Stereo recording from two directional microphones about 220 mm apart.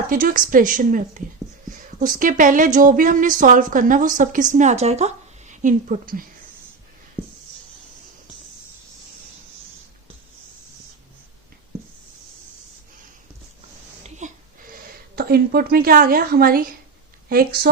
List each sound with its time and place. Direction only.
0.1 s a woman's voice: 40° right (ahead or behind)
14.0 s a sound: 35° right (ahead or behind)
14.8 s a woman's voice: 45° right (ahead or behind)